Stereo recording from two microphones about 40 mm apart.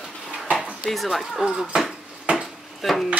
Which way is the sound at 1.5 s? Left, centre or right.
Centre.